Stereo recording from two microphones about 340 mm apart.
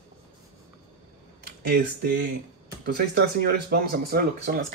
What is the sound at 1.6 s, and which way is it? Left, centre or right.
Speech, right.